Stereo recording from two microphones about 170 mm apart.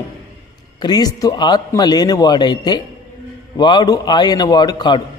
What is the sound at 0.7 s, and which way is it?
A man's voice, 25° left (ahead or behind).